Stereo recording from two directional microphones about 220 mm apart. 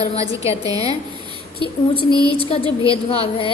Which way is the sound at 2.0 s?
25° left (ahead or behind).